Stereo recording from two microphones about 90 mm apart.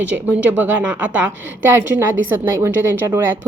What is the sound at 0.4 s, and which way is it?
A woman's voice, 20° right (ahead or behind).